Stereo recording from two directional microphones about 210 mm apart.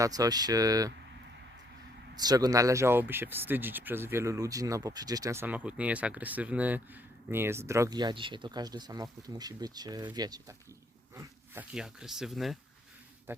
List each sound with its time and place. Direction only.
0.0 s speech: 15° right (ahead or behind)
2.1 s speech: 20° right (ahead or behind)
11.1 s dog: 15° right (ahead or behind)
11.7 s speech: 5° right (ahead or behind)